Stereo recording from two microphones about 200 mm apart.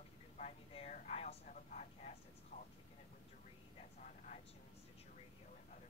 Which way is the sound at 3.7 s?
35° left (ahead or behind).